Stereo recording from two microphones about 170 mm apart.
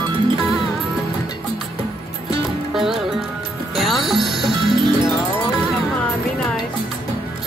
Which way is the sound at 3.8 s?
Centre (ahead or behind).